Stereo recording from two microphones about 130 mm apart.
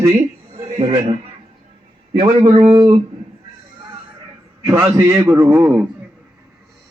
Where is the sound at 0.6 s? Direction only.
50° right (ahead or behind).